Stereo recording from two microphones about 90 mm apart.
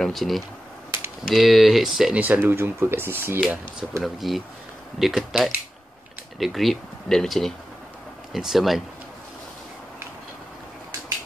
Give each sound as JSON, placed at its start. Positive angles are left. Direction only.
{"t": 0.0, "sound": "speech", "side_deg": 0}
{"t": 2.1, "sound": "speech", "side_deg": -20}
{"t": 4.0, "sound": "speech", "side_deg": 0}